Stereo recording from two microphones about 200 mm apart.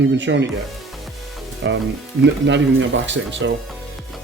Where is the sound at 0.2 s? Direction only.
65° right (ahead or behind).